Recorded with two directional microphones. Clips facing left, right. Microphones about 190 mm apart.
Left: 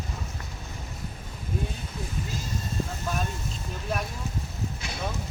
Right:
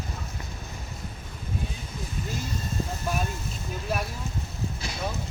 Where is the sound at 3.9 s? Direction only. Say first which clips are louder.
Right 1 dB; 5° right (ahead or behind).